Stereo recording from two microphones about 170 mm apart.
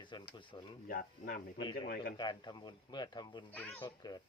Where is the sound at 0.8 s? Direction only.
55° left (ahead or behind).